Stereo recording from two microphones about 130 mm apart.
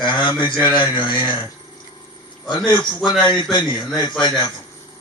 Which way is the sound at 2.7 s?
35° left (ahead or behind).